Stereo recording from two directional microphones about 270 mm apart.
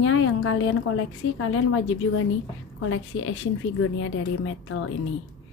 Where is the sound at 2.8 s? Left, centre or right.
Left.